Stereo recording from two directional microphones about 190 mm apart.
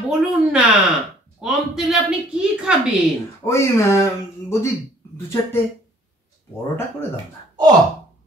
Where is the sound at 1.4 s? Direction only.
5° right (ahead or behind).